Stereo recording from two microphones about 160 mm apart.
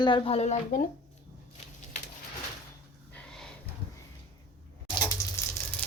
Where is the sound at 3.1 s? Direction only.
5° left (ahead or behind).